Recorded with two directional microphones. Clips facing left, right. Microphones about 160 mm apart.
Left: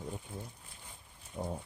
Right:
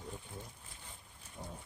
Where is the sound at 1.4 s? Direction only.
90° left.